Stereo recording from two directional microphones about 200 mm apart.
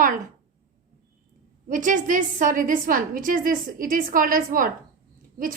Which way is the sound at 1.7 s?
40° right (ahead or behind).